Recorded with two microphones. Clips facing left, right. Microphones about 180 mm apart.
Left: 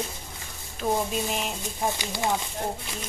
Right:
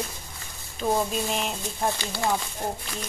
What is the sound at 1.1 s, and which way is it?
Speech, centre (ahead or behind).